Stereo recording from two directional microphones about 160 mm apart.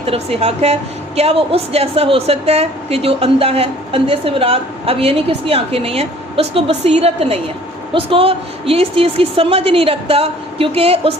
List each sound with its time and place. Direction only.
0.0 s a woman's voice: 40° right (ahead or behind)